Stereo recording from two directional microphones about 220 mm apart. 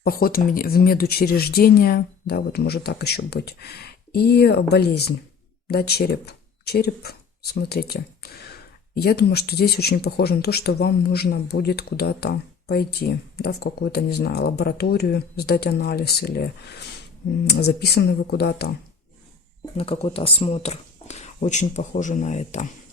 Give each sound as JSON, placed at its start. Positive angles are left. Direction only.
{"t": 0.0, "sound": "speech", "side_deg": 40}
{"t": 19.7, "sound": "speech", "side_deg": 25}